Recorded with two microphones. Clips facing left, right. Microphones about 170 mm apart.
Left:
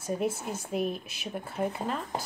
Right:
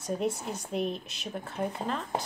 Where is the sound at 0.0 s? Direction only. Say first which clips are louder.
Even; 5° left (ahead or behind).